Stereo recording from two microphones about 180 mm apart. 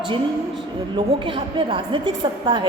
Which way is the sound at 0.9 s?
25° right (ahead or behind).